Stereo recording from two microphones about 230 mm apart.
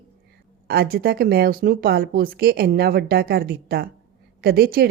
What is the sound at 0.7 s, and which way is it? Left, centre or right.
Speech, right.